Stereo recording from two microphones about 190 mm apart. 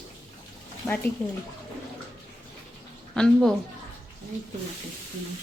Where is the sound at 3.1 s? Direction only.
5° left (ahead or behind).